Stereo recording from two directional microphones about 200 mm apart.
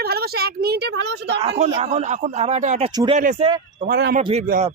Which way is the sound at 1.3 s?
30° right (ahead or behind).